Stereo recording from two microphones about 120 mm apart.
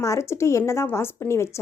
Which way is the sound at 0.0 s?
25° left (ahead or behind).